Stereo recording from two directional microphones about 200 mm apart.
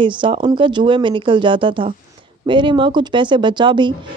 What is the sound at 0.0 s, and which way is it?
Speech, 25° right (ahead or behind).